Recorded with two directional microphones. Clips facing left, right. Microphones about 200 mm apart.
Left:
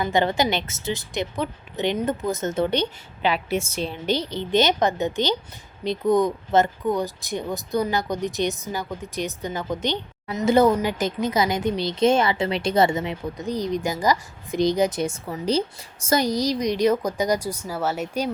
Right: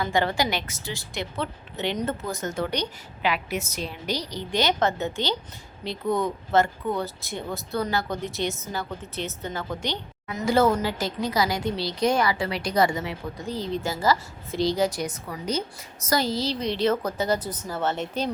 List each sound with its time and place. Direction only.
0.0 s speech: 20° left (ahead or behind)
16.2 s speech: 15° left (ahead or behind)